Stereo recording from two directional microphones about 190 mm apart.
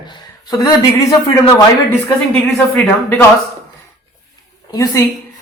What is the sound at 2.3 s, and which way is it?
Speech, 5° left (ahead or behind).